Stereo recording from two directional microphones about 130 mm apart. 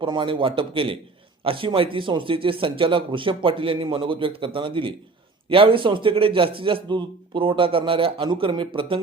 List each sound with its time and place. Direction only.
0.0 s a man's voice: 40° right (ahead or behind)